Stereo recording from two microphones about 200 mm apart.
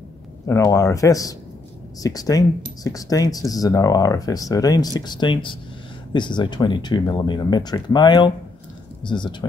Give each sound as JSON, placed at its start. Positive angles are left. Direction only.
{"t": 0.5, "sound": "speech", "side_deg": 15}